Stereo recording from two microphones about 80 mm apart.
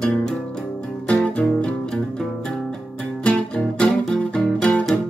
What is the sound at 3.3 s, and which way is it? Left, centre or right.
Music, centre.